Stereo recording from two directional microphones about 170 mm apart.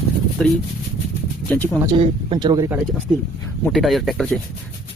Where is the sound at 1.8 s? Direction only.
30° right (ahead or behind).